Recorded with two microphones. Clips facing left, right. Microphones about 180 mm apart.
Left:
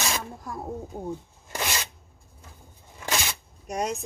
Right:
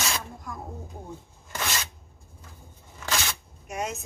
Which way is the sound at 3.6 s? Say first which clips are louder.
Left 4 dB; 35° left (ahead or behind).